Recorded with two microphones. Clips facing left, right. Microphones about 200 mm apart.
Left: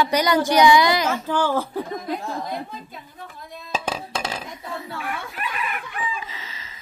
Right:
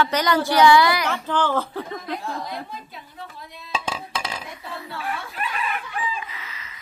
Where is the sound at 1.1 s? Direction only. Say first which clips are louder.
Left 1 dB; 10° left (ahead or behind).